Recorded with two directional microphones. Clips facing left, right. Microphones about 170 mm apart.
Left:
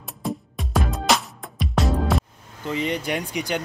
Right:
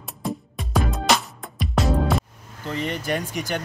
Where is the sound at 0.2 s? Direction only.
Centre (ahead or behind).